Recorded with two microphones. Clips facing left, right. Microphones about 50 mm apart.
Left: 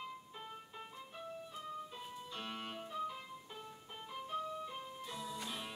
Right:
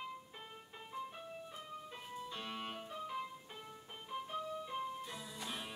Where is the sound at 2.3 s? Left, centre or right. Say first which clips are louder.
Left 2 dB; centre.